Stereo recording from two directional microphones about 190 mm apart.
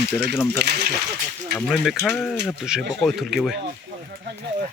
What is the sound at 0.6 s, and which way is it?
Speech, 60° right (ahead or behind).